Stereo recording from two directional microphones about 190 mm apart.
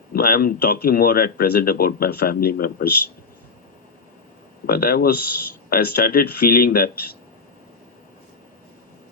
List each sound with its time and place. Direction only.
0.1 s speech: 50° left (ahead or behind)
4.6 s speech: 50° left (ahead or behind)